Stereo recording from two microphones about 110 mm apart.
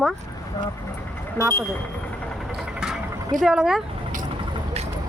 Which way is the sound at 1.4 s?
20° left (ahead or behind).